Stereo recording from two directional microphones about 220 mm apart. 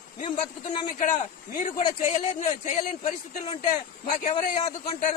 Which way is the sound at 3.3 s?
30° left (ahead or behind).